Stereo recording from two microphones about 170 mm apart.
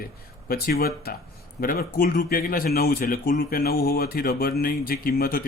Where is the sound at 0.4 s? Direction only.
65° left (ahead or behind).